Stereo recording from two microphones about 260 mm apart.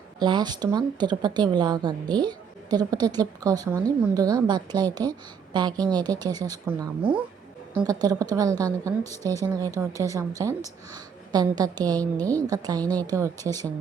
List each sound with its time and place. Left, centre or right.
0.2 s speech: centre